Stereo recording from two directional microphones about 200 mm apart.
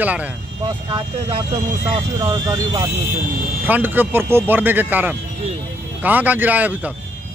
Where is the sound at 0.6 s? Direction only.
30° right (ahead or behind); by 6.9 s 10° right (ahead or behind).